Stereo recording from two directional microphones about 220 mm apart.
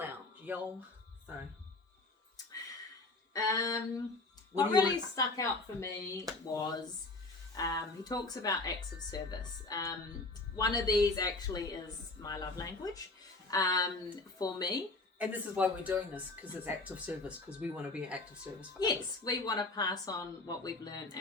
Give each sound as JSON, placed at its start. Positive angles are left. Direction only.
{"t": 0.0, "sound": "a sound", "side_deg": -10}
{"t": 3.3, "sound": "a woman's voice", "side_deg": 15}
{"t": 7.5, "sound": "a woman's voice", "side_deg": 15}
{"t": 15.2, "sound": "speech", "side_deg": -5}
{"t": 18.8, "sound": "a woman's voice", "side_deg": 15}